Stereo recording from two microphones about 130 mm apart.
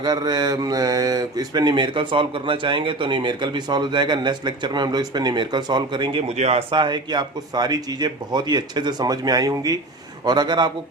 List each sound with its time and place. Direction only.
0.0 s speech: 30° right (ahead or behind); by 6.7 s 50° right (ahead or behind)
6.7 s speech: 35° right (ahead or behind)